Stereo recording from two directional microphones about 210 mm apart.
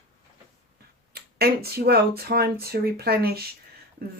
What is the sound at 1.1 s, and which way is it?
Speech, 45° right (ahead or behind).